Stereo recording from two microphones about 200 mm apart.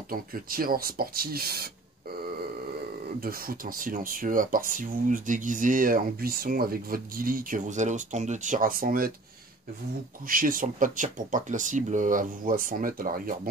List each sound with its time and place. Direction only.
0.1 s speech: 45° right (ahead or behind)
3.2 s speech: 45° right (ahead or behind)
10.2 s speech: 45° right (ahead or behind)